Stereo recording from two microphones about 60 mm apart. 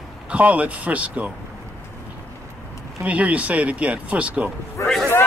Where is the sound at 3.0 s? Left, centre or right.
Right.